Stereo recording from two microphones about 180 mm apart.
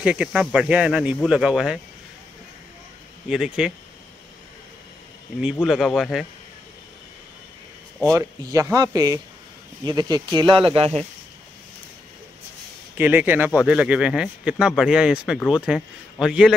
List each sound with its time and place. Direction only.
0.0 s speech: 5° right (ahead or behind)
3.3 s speech: 5° right (ahead or behind)
5.4 s speech: 5° right (ahead or behind)
8.1 s speech: 15° right (ahead or behind); by 11.1 s 35° right (ahead or behind)
12.9 s speech: 10° right (ahead or behind)